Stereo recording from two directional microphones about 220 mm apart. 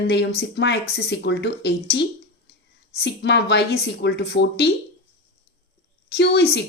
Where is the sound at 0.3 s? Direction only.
50° left (ahead or behind).